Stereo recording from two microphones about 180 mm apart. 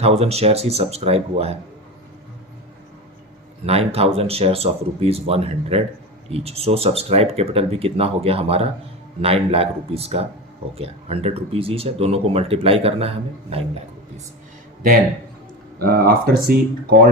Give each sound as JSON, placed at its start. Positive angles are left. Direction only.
{"t": 0.0, "sound": "speech", "side_deg": -35}
{"t": 3.7, "sound": "speech", "side_deg": -35}
{"t": 15.8, "sound": "speech", "side_deg": -55}